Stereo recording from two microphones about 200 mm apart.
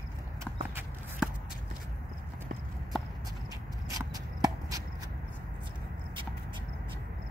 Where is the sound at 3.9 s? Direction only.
20° right (ahead or behind).